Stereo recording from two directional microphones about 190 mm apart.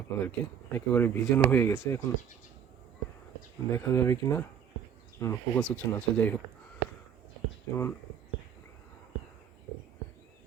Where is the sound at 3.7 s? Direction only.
15° left (ahead or behind).